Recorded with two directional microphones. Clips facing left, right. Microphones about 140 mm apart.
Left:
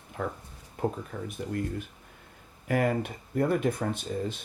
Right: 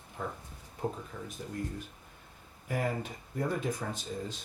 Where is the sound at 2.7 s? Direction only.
70° left (ahead or behind).